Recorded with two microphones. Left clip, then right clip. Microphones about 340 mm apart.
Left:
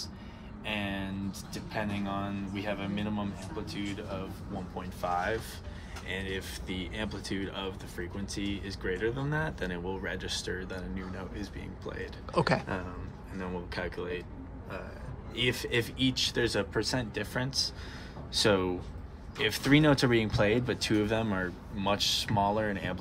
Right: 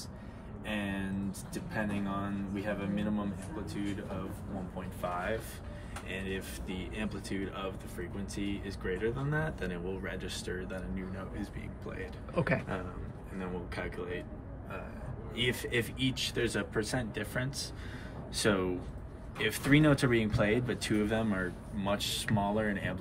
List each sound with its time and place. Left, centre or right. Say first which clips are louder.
0.7 s speech: left 2 dB; centre
4.7 s speech: left 5 dB; left
12.4 s speech: left 4 dB; centre
13.4 s speech: left 3 dB; left
15.3 s speech: left 2 dB; left